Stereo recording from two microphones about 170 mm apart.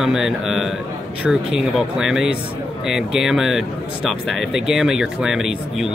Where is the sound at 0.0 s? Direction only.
Centre (ahead or behind).